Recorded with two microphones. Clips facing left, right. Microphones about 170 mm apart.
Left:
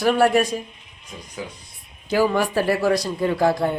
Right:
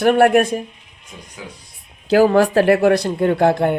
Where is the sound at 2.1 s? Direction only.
65° right (ahead or behind).